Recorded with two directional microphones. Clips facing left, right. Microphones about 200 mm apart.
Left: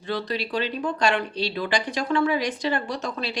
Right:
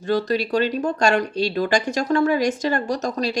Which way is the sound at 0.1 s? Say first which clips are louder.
Right 7 dB; 45° right (ahead or behind).